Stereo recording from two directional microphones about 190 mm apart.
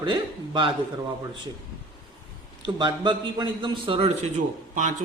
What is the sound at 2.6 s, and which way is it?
A man's voice, 25° right (ahead or behind).